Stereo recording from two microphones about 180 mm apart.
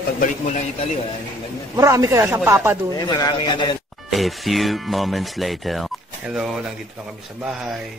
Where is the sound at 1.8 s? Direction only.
15° right (ahead or behind).